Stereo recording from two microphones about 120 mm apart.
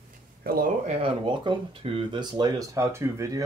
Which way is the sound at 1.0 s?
40° right (ahead or behind).